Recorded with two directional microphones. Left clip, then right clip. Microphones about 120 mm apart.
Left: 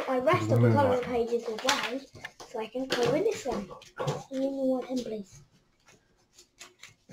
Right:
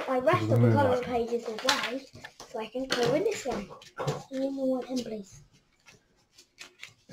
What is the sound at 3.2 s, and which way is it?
Speech, 25° right (ahead or behind).